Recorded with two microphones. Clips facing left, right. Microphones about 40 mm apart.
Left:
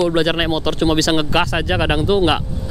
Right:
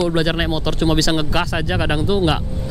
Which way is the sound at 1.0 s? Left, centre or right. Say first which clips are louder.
Left 3 dB; left.